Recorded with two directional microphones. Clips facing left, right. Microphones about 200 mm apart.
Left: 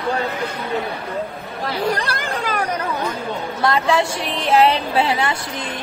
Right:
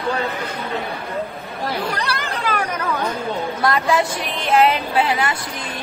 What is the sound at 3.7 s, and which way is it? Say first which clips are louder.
Speech: left 1 dB; 30° left (ahead or behind).